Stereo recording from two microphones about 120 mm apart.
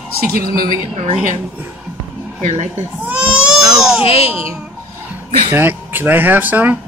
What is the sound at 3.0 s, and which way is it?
Baby cry, 10° right (ahead or behind).